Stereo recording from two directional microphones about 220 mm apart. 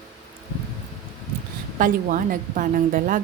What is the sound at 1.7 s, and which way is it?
A woman's voice, 40° right (ahead or behind).